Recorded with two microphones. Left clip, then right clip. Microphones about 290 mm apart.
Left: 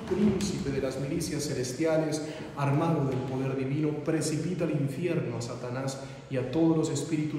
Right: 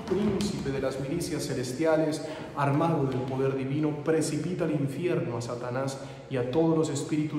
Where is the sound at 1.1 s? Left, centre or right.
Centre.